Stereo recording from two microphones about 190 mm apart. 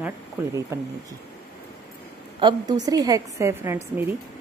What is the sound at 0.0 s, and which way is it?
Speech, 15° right (ahead or behind).